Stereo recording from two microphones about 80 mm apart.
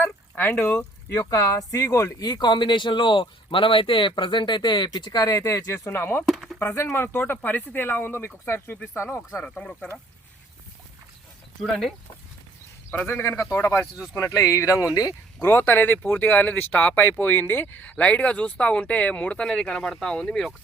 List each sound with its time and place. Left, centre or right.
0.0 s a sound: left
1.3 s speech: left
6.2 s a sound: centre
6.7 s speech: left
9.4 s speech: centre
11.6 s speech: centre
13.1 s speech: left
15.4 s speech: left; by 20.5 s centre